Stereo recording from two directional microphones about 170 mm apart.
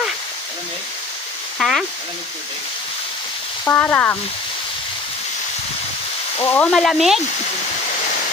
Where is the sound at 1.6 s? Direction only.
Centre (ahead or behind).